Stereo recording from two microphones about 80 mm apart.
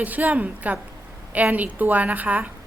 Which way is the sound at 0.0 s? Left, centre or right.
Centre.